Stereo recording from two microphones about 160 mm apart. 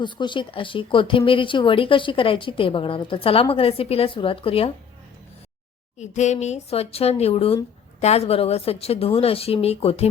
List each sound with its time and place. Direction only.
0.0 s speech: 30° left (ahead or behind)
6.0 s speech: 45° left (ahead or behind)